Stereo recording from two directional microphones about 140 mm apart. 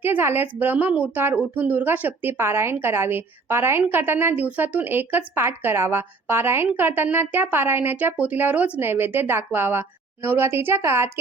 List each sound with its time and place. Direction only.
0.0 s a woman's voice: 15° right (ahead or behind)